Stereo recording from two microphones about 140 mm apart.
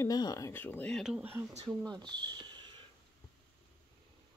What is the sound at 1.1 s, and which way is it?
Speech, 15° right (ahead or behind).